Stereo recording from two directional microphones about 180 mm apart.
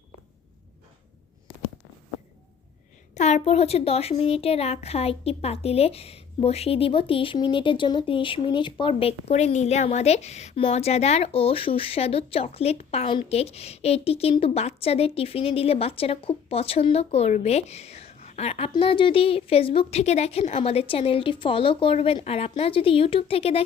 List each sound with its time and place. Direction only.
3.2 s speech: 40° left (ahead or behind)